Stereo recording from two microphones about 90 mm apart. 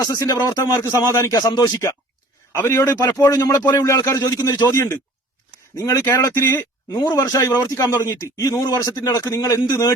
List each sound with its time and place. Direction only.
0.0 s speech: 40° left (ahead or behind)
0.8 s speech: 35° left (ahead or behind)
1.3 s speech: 45° left (ahead or behind)
2.5 s a man's voice: 25° left (ahead or behind)
3.2 s speech: 45° left (ahead or behind)
4.2 s speech: 45° left (ahead or behind)
4.7 s speech: 35° left (ahead or behind)
6.9 s speech: 45° left (ahead or behind)